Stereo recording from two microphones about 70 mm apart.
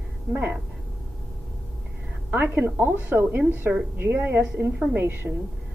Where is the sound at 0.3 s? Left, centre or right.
Right.